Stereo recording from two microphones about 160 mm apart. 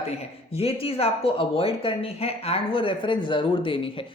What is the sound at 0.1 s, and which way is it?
Speech, 40° left (ahead or behind).